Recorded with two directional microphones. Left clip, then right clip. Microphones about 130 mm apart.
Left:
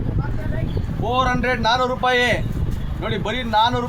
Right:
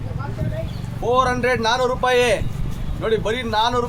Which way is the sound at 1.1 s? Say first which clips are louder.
Right 2 dB; 45° right (ahead or behind).